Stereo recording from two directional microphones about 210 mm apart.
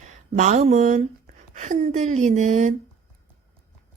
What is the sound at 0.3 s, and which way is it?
A woman's voice, 35° right (ahead or behind).